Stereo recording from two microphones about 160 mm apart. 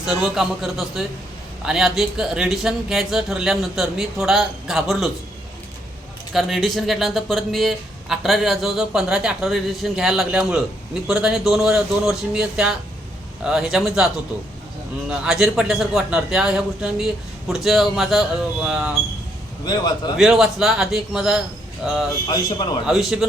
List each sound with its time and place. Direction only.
0.0 s speech: 5° right (ahead or behind)
6.3 s speech: centre (ahead or behind)
15.2 s speech: 5° right (ahead or behind)
19.6 s a man's voice: 25° left (ahead or behind)
20.1 s speech: 5° right (ahead or behind)
22.3 s a man's voice: 25° left (ahead or behind)
22.9 s speech: centre (ahead or behind)